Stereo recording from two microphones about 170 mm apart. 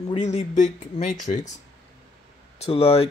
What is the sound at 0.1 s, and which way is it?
Speech, 40° left (ahead or behind).